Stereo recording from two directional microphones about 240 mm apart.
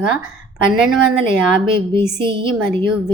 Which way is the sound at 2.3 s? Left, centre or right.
Centre.